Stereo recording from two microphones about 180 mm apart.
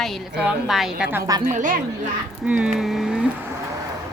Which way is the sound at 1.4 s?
50° right (ahead or behind).